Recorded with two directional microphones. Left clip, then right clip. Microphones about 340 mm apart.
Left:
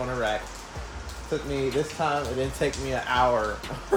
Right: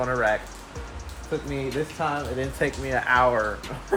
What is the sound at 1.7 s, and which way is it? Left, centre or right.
Speech, centre.